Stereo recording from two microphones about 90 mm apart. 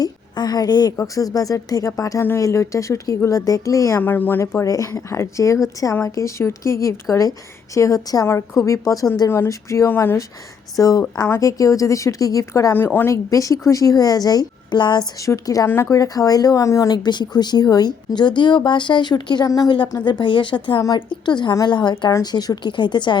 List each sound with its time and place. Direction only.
0.0 s a woman's voice: 45° left (ahead or behind)
4.0 s a woman's voice: 20° left (ahead or behind)
9.9 s a woman's voice: 25° left (ahead or behind)
10.8 s a woman's voice: 40° left (ahead or behind)
12.7 s a woman's voice: 20° left (ahead or behind)
13.1 s a woman's voice: 40° left (ahead or behind); by 15.0 s 55° left (ahead or behind)
15.2 s a woman's voice: 40° left (ahead or behind)
15.6 s a woman's voice: 25° left (ahead or behind)
15.9 s a woman's voice: 40° left (ahead or behind)
17.0 s speech: 55° left (ahead or behind)
20.1 s a woman's voice: 60° left (ahead or behind)